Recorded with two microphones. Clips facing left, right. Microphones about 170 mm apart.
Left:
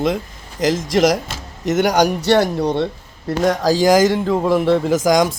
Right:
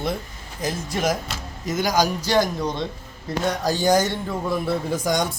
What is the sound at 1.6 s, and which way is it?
A man's voice, 70° left (ahead or behind).